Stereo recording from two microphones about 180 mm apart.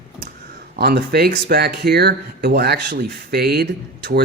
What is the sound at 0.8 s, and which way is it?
Speech, 60° right (ahead or behind).